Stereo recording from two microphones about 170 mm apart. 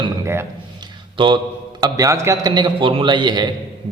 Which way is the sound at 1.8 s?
20° right (ahead or behind).